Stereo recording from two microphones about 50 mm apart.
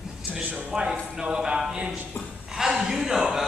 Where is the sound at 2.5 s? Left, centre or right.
Centre.